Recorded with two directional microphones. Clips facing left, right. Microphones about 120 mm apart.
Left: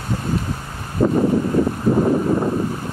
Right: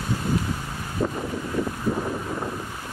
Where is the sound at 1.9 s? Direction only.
50° left (ahead or behind).